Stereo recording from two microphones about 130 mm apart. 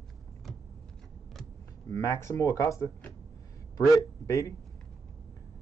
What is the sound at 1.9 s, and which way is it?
Speech, 20° left (ahead or behind).